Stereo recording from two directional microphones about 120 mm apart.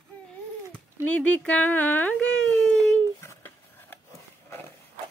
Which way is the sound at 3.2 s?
20° left (ahead or behind).